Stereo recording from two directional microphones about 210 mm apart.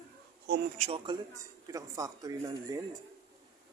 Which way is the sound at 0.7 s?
35° right (ahead or behind).